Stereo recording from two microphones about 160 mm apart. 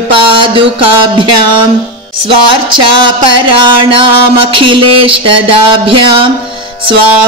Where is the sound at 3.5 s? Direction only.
30° right (ahead or behind).